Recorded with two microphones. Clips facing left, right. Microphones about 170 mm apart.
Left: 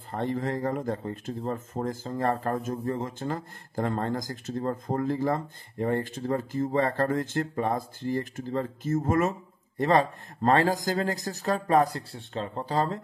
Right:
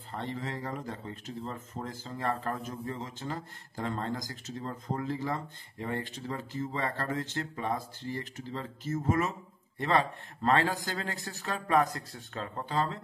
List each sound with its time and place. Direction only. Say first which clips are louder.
0.1 s speech: left 8 dB; 50° left (ahead or behind)